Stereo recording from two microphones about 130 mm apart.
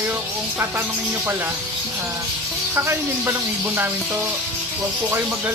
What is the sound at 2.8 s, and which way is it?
Speech, 15° right (ahead or behind).